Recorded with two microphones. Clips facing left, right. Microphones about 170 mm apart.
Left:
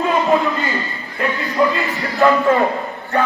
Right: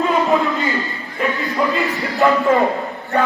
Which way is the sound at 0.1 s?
Centre (ahead or behind).